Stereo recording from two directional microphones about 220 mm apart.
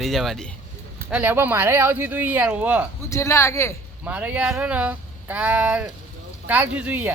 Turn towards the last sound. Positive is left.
turn(degrees=-10)  # may be behind; listen again after turning